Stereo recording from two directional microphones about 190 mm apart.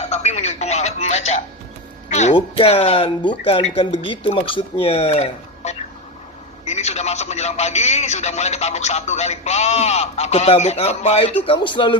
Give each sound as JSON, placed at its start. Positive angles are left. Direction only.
{"t": 0.1, "sound": "a man's voice", "side_deg": 35}